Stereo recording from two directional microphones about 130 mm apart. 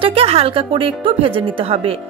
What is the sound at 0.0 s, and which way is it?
A woman's voice, 45° right (ahead or behind).